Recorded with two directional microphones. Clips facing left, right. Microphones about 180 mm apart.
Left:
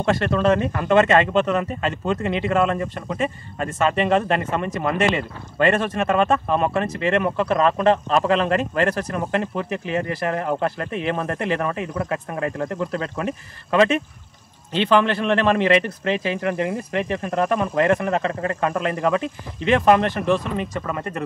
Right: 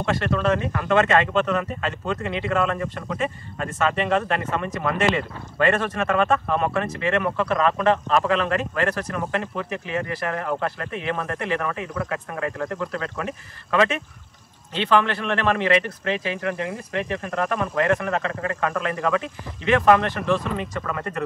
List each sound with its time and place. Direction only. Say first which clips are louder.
0.0 s speech: left 3 dB; 30° left (ahead or behind)